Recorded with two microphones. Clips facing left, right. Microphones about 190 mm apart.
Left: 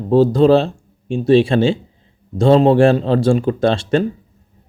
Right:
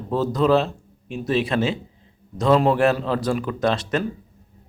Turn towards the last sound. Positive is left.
turn(degrees=30)  # may be behind; listen again after turning